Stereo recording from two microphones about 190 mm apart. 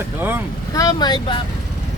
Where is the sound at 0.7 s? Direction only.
20° left (ahead or behind).